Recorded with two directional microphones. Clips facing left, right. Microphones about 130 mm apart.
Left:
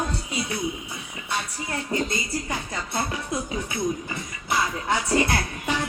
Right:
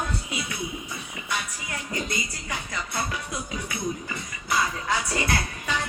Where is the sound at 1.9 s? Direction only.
25° left (ahead or behind).